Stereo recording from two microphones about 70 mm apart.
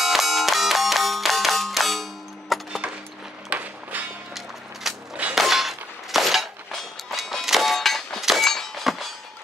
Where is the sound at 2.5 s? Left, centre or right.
Centre.